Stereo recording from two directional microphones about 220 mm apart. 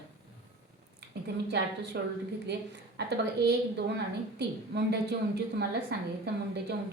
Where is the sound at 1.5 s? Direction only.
50° right (ahead or behind).